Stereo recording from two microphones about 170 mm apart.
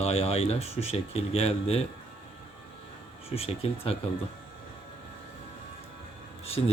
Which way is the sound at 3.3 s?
35° left (ahead or behind).